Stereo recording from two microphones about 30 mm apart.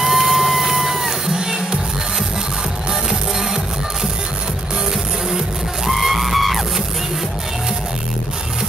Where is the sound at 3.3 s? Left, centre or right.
Centre.